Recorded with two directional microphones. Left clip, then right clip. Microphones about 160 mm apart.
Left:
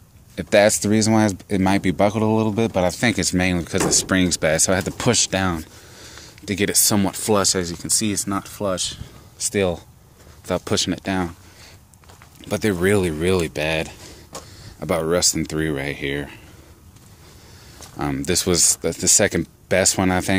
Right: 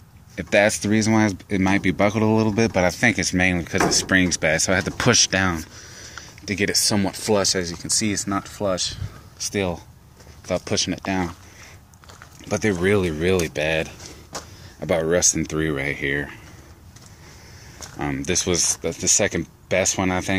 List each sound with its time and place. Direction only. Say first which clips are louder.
0.4 s speech: left 3 dB; 25° left (ahead or behind)
2.2 s speech: even; 5° left (ahead or behind)
3.0 s speech: right 1 dB; 25° left (ahead or behind)
4.9 s speech: right 2 dB; 5° left (ahead or behind); by 8.8 s 20° left (ahead or behind)
9.4 s speech: left 4 dB; 40° left (ahead or behind)
12.4 s speech: left 1 dB; 20° left (ahead or behind)
17.9 s speech: left 1 dB; 25° left (ahead or behind)